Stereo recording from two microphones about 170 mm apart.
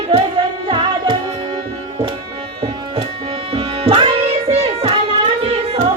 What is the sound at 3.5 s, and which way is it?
Music, 35° right (ahead or behind).